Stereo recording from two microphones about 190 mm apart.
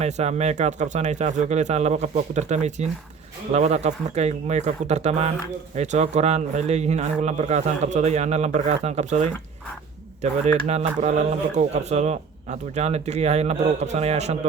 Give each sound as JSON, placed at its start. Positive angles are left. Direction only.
{"t": 0.0, "sound": "speech", "side_deg": -35}